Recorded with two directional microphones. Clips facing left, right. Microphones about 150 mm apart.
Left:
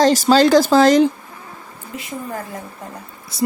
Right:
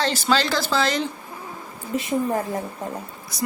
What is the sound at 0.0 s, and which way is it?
A woman's voice, 40° left (ahead or behind).